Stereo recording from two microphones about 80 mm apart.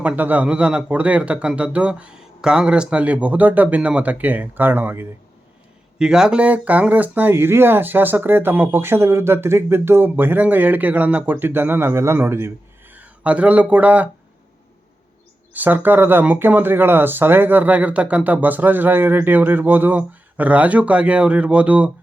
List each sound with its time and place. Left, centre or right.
0.0 s speech: right
6.0 s speech: centre; by 12.5 s right
12.9 s speech: centre
15.5 s speech: right